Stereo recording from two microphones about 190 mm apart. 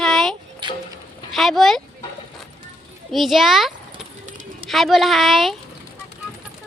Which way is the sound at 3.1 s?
Centre (ahead or behind).